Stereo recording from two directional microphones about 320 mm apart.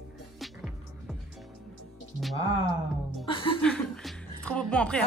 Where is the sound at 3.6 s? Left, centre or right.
Centre.